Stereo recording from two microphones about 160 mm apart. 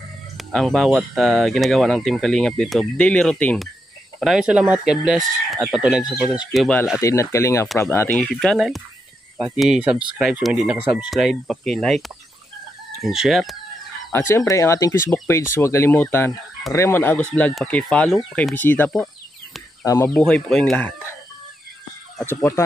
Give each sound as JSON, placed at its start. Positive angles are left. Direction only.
{"t": 0.4, "sound": "speech", "side_deg": 5}
{"t": 7.0, "sound": "speech", "side_deg": 20}
{"t": 14.1, "sound": "speech", "side_deg": 15}
{"t": 20.2, "sound": "speech", "side_deg": 5}